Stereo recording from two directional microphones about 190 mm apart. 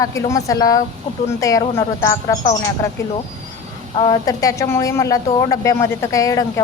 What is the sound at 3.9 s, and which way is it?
A woman's voice, 25° left (ahead or behind).